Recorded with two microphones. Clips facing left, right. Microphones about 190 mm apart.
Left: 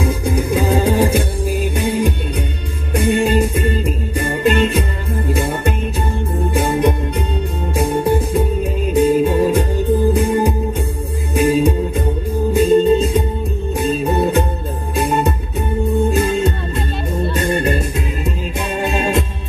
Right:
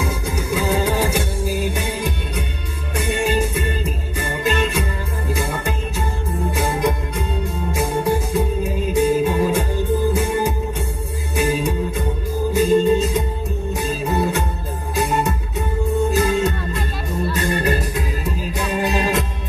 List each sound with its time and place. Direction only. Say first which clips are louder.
0.0 s music: left 6 dB; 30° left (ahead or behind)